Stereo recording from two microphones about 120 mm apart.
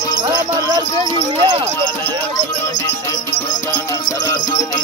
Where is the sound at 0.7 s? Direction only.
45° right (ahead or behind).